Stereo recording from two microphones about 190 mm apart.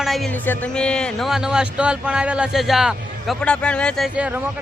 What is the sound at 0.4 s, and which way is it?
A man's voice, 5° left (ahead or behind).